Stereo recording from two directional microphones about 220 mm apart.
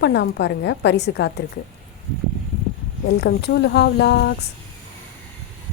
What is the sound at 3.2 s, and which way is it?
Speech, 50° left (ahead or behind).